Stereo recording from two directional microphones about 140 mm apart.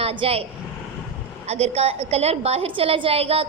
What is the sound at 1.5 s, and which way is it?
A woman's voice, 50° right (ahead or behind).